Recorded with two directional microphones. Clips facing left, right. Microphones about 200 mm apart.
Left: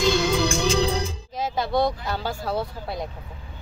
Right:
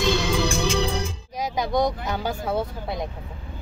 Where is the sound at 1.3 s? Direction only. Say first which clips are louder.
Even; 15° right (ahead or behind).